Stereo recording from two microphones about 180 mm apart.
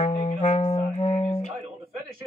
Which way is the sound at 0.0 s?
40° left (ahead or behind).